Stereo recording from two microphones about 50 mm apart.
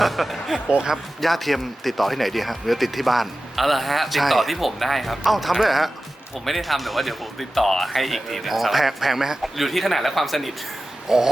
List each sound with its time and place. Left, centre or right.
0.0 s a sound: centre
0.7 s speech: centre
1.2 s speech: centre